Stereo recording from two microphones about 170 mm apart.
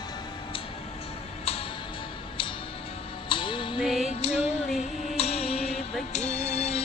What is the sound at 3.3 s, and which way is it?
Music, 30° left (ahead or behind).